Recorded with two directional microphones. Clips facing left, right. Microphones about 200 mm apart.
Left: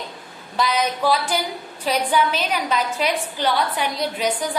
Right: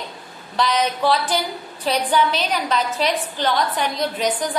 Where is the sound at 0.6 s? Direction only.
10° left (ahead or behind).